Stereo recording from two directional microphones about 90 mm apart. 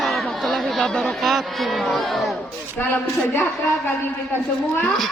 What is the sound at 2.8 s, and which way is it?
Speech, 20° left (ahead or behind).